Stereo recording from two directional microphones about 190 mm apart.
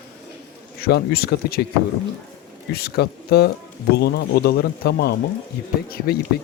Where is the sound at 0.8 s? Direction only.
55° left (ahead or behind).